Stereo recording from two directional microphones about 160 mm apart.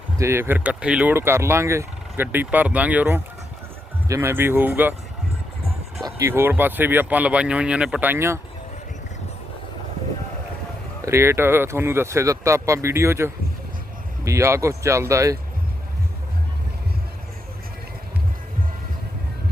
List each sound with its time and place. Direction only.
0.2 s speech: 15° right (ahead or behind)
6.1 s speech: 15° right (ahead or behind)
11.0 s speech: 15° right (ahead or behind)